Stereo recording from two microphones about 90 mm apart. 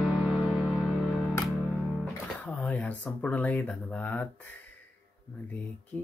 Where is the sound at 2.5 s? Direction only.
15° left (ahead or behind).